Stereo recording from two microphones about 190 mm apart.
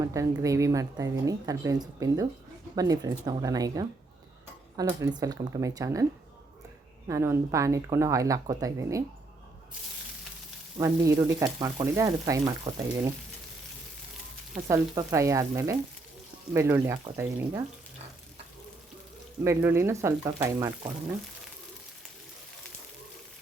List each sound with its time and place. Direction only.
0.1 s speech: 15° right (ahead or behind)
7.1 s speech: 15° right (ahead or behind)
10.8 s speech: 15° right (ahead or behind)
14.7 s speech: 15° right (ahead or behind)
19.5 s speech: 15° right (ahead or behind)